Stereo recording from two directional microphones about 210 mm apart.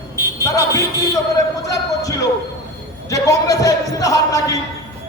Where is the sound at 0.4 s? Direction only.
15° left (ahead or behind).